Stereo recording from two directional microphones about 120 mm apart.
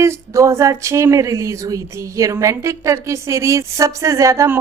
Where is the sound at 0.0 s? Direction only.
25° right (ahead or behind).